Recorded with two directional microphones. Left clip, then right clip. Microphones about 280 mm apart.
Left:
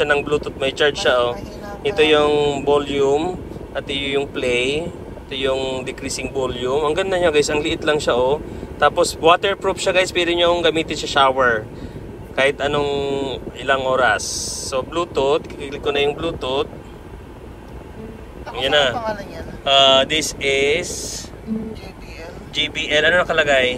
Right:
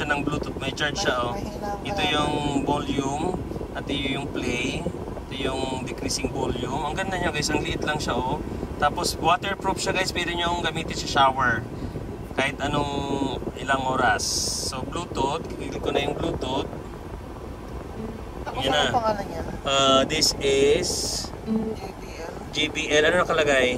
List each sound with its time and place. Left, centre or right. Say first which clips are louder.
0.0 s speech: left 8 dB; centre
18.7 s speech: left 4 dB; centre
22.6 s speech: left 4 dB; centre